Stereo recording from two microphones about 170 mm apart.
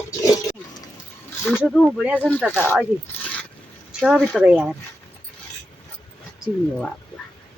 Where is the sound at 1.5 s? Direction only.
Centre (ahead or behind).